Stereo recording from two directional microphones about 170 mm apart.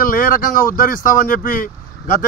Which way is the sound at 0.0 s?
55° left (ahead or behind).